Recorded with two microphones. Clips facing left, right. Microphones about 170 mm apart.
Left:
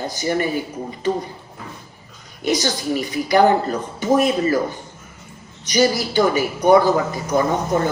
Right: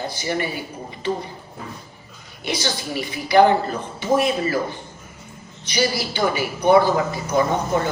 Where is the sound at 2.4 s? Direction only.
45° left (ahead or behind).